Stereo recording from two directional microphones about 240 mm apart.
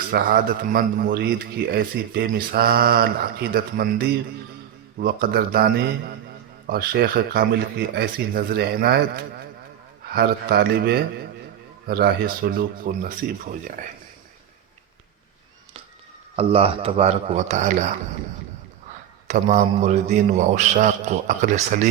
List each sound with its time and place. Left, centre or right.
0.1 s a man's voice: right
16.3 s a man's voice: right
19.3 s a man's voice: right